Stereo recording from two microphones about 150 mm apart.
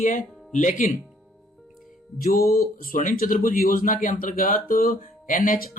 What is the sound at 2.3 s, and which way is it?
Speech, 20° left (ahead or behind).